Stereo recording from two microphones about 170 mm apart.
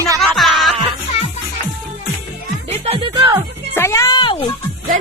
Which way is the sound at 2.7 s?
35° right (ahead or behind).